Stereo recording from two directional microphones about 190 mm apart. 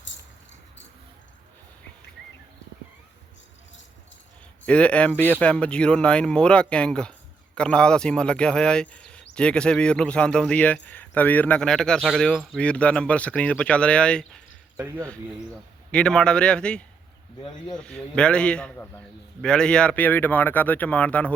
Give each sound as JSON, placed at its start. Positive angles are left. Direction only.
{"t": 4.6, "sound": "speech", "side_deg": 5}
{"t": 14.8, "sound": "speech", "side_deg": -15}
{"t": 15.9, "sound": "speech", "side_deg": 5}